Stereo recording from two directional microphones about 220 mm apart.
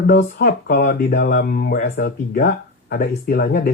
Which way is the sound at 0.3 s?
50° left (ahead or behind).